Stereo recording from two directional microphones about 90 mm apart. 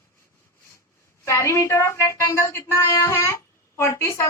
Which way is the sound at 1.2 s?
30° left (ahead or behind).